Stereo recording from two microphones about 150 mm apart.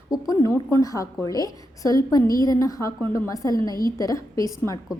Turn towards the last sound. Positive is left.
turn(degrees=20)  # may be behind; listen again after turning